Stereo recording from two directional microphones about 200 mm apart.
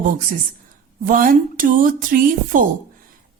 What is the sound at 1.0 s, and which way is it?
Speech, 45° right (ahead or behind).